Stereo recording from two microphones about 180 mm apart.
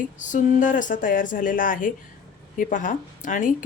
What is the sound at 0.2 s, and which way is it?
A woman's voice, 45° left (ahead or behind).